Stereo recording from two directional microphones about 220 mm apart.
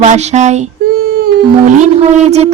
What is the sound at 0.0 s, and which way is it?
Speech, 30° right (ahead or behind).